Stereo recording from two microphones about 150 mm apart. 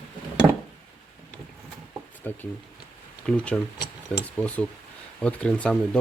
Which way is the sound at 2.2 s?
10° left (ahead or behind).